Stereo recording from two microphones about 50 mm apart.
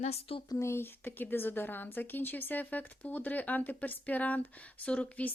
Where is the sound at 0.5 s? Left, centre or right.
Left.